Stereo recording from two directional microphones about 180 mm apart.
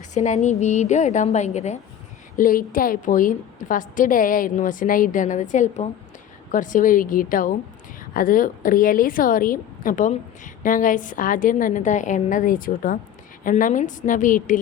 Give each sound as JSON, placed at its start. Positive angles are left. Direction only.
{"t": 0.1, "sound": "a woman's voice", "side_deg": 40}
{"t": 2.3, "sound": "a woman's voice", "side_deg": 50}